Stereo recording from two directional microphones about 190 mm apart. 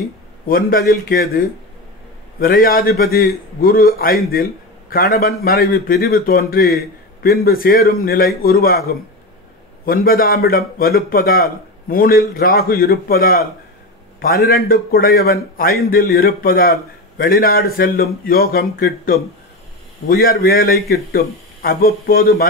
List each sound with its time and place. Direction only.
0.5 s a man's voice: 50° left (ahead or behind)
9.8 s a man's voice: 50° left (ahead or behind)